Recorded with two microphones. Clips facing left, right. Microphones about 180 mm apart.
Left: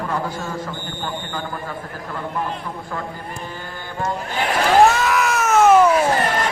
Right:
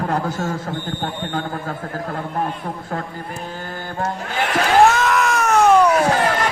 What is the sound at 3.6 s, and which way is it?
Mantra, 45° right (ahead or behind).